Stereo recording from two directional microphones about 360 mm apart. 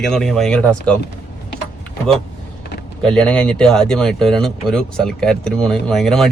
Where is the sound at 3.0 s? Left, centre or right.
Centre.